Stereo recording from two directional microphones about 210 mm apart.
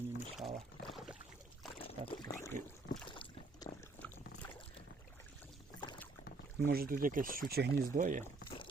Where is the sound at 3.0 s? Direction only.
25° left (ahead or behind).